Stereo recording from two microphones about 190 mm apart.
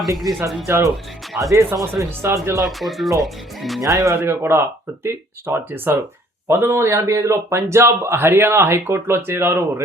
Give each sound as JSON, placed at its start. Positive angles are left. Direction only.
{"t": 0.3, "sound": "a man's voice", "side_deg": -15}
{"t": 2.6, "sound": "speech", "side_deg": 0}
{"t": 3.8, "sound": "a man's voice", "side_deg": -15}